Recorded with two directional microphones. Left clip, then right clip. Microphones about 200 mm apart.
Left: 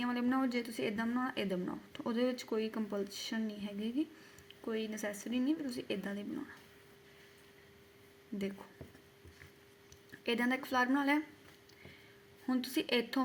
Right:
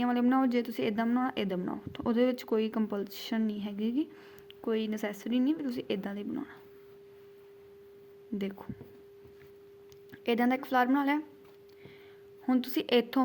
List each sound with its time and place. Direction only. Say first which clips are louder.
0.0 s speech: right 7 dB; 30° right (ahead or behind)
10.2 s speech: right 5 dB; 25° right (ahead or behind)
12.5 s speech: right 6 dB; 30° right (ahead or behind)